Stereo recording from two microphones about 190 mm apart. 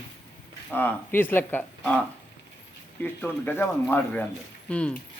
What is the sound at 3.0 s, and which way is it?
A man's voice, 10° left (ahead or behind).